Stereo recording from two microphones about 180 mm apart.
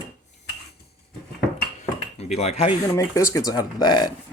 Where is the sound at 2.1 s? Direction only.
35° left (ahead or behind).